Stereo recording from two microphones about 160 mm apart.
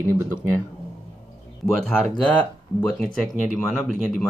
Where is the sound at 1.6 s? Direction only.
5° left (ahead or behind).